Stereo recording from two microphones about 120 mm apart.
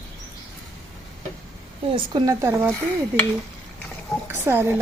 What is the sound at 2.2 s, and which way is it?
Speech, 20° right (ahead or behind).